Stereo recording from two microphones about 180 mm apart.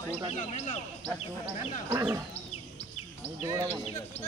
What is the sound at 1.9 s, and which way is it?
Speech, 15° right (ahead or behind).